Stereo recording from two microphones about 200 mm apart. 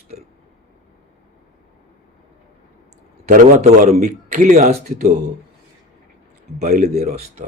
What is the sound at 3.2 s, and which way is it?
Speech, 35° right (ahead or behind).